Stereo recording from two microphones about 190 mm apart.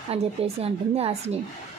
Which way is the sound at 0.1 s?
30° right (ahead or behind).